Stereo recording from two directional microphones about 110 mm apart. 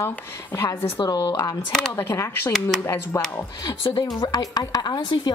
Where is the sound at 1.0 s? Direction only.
40° left (ahead or behind).